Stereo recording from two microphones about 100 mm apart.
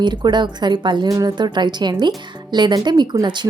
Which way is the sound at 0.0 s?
50° right (ahead or behind).